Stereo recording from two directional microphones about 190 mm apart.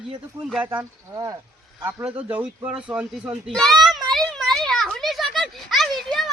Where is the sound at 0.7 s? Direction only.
15° right (ahead or behind).